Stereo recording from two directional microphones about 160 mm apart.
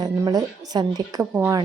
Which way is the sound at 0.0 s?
25° right (ahead or behind).